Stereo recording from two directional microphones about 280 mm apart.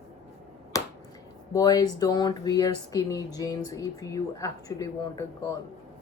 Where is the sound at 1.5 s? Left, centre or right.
Centre.